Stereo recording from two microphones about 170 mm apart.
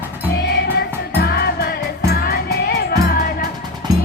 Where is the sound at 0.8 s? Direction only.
70° left (ahead or behind).